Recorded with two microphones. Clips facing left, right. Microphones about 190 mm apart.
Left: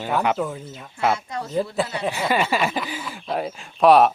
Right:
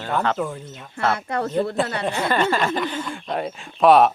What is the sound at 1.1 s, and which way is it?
Speech, 60° right (ahead or behind).